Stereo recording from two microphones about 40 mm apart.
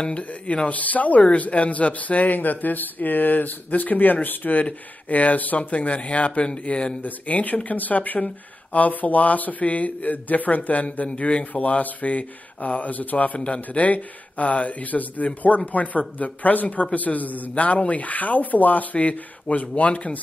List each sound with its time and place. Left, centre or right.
0.0 s speech: left
5.7 s speech: left
7.0 s speech: left